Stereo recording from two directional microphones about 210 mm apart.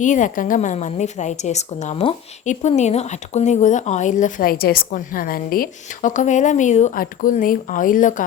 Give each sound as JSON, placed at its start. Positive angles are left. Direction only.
{"t": 0.0, "sound": "a woman's voice", "side_deg": 35}